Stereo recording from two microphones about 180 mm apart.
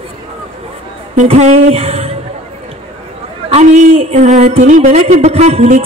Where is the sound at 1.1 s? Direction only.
40° right (ahead or behind).